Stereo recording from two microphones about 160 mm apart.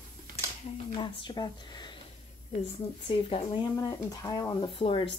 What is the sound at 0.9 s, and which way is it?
Speech, 30° left (ahead or behind).